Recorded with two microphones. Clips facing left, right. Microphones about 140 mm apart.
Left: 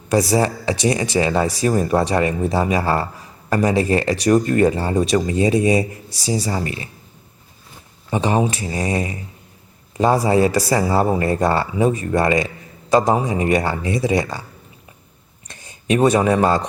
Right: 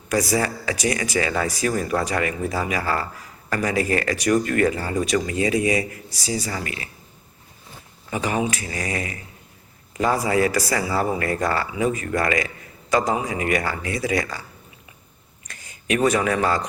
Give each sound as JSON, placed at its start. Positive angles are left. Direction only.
{"t": 0.1, "sound": "speech", "side_deg": 25}
{"t": 8.1, "sound": "speech", "side_deg": 30}
{"t": 15.4, "sound": "speech", "side_deg": 25}